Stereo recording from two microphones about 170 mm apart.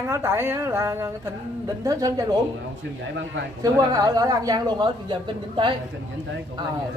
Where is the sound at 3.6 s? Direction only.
20° right (ahead or behind).